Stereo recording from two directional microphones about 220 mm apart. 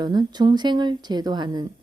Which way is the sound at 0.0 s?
20° right (ahead or behind).